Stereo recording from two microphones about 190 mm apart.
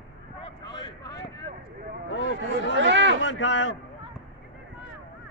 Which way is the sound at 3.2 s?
75° left (ahead or behind).